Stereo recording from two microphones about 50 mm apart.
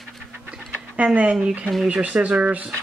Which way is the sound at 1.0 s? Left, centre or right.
Right.